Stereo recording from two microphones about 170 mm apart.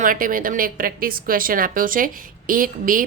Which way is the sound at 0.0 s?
55° right (ahead or behind).